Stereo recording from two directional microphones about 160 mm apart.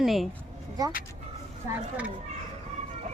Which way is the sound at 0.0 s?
Centre (ahead or behind).